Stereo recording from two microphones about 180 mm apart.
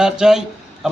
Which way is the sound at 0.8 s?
5° right (ahead or behind).